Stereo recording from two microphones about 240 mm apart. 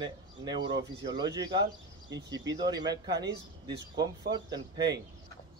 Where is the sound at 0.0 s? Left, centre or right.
Centre.